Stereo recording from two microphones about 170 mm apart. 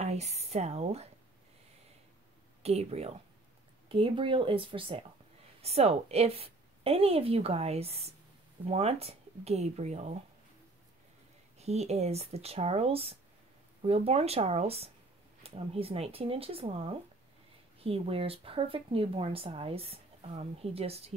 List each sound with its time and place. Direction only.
0.0 s speech: 40° right (ahead or behind)
2.6 s speech: 40° right (ahead or behind)
11.5 s speech: 40° right (ahead or behind)